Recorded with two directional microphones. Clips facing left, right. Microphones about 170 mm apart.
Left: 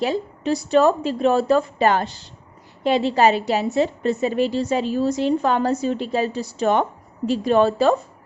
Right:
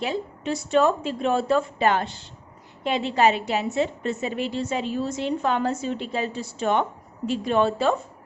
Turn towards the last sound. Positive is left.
turn(degrees=40)  # may be behind; listen again after turning